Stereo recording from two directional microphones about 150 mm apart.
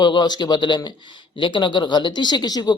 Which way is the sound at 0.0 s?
30° left (ahead or behind).